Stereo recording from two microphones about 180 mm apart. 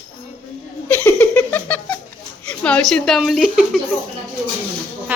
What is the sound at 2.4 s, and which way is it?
Speech, 5° left (ahead or behind).